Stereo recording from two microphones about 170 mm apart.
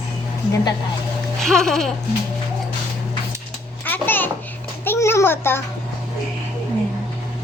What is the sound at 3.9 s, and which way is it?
Babbling, 10° left (ahead or behind).